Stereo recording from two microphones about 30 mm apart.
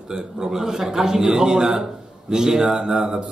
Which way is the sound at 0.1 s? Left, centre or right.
Centre.